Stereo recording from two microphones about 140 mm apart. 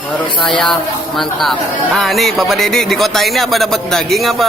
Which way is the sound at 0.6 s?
Centre (ahead or behind).